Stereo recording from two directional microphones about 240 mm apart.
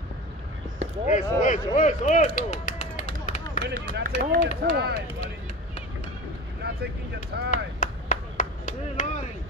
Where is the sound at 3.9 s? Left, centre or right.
Right.